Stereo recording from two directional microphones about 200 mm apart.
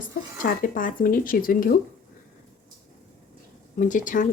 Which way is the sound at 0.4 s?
45° left (ahead or behind).